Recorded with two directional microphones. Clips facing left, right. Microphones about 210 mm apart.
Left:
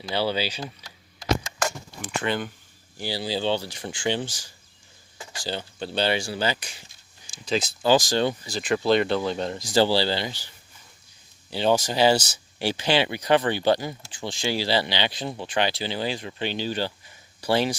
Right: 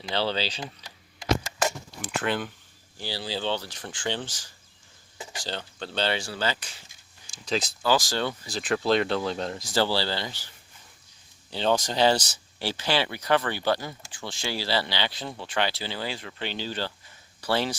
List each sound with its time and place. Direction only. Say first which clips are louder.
0.1 s speech: left 2 dB; 10° left (ahead or behind)
0.9 s keys jangling: even; 10° right (ahead or behind)
3.0 s speech: left 4 dB; 15° left (ahead or behind)
5.1 s a sound: right 2 dB; 20° right (ahead or behind)
5.4 s speech: left 4 dB; 10° left (ahead or behind)
7.4 s speech: left 3 dB; centre (ahead or behind)
7.8 s speech: left 6 dB; 20° left (ahead or behind)
8.4 s speech: left 3 dB; centre (ahead or behind)
9.6 s speech: left 5 dB; 15° left (ahead or behind)
11.5 s speech: left 3 dB; 10° left (ahead or behind)